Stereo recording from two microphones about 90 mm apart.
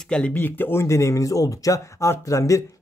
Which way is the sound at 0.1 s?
15° left (ahead or behind).